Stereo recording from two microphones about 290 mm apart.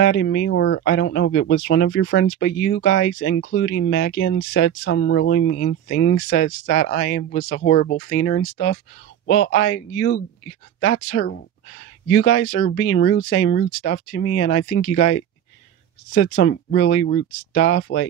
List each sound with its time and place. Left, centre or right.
0.0 s speech: left